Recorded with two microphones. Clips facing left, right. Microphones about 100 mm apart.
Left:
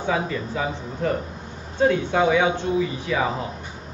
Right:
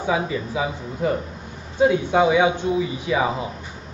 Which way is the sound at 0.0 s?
10° right (ahead or behind).